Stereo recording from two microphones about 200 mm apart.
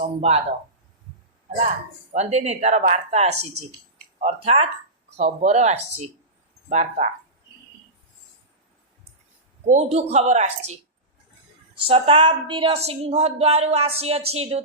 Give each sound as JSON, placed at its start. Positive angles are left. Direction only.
{"t": 0.2, "sound": "speech", "side_deg": -30}
{"t": 2.1, "sound": "a woman's voice", "side_deg": -35}
{"t": 9.6, "sound": "speech", "side_deg": -35}
{"t": 11.9, "sound": "a woman's voice", "side_deg": -30}